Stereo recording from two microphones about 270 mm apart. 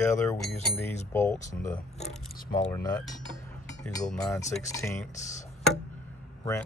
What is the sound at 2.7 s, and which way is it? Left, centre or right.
Speech, centre.